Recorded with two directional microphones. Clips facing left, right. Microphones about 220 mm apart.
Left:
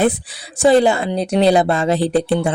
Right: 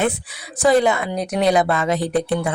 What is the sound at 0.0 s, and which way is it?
Speech, 30° left (ahead or behind).